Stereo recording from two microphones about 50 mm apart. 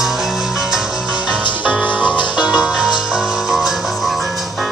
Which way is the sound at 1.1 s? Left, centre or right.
Right.